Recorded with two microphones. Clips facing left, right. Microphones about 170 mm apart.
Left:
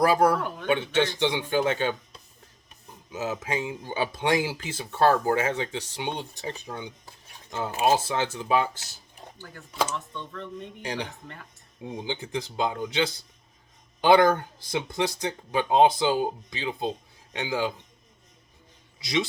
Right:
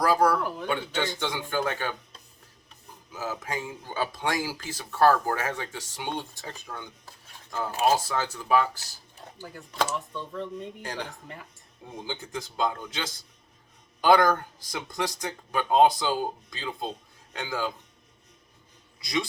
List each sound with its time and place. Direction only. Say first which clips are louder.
0.0 s speech: left 2 dB; 20° left (ahead or behind)
3.1 s speech: left 4 dB; 20° left (ahead or behind)
9.4 s speech: even; 10° right (ahead or behind)
10.8 s speech: left 3 dB; 15° left (ahead or behind)